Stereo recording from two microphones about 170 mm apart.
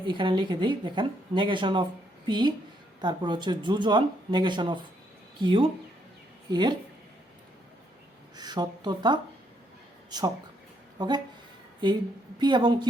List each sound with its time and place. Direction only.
0.0 s a woman's voice: 30° right (ahead or behind)
8.4 s a woman's voice: 25° right (ahead or behind)